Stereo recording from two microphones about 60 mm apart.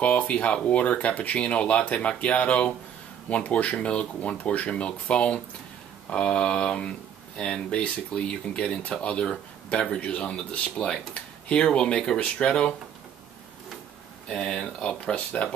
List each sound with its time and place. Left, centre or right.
0.0 s speech: left
14.3 s speech: centre